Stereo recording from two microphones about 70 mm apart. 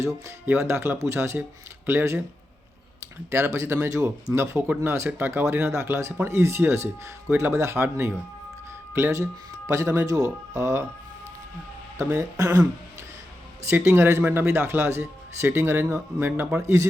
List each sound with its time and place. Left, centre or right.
0.4 s speech: right
3.2 s speech: right
11.9 s speech: right
13.7 s speech: right
16.6 s speech: right